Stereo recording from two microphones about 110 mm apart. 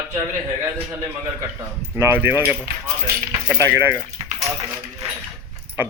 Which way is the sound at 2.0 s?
20° right (ahead or behind).